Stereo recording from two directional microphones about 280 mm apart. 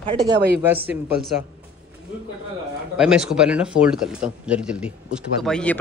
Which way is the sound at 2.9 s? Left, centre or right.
Centre.